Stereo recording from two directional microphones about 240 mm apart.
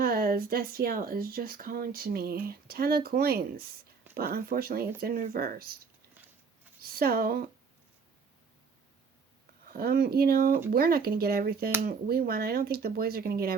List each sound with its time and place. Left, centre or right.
0.0 s speech: right
6.8 s speech: right
9.6 s speech: right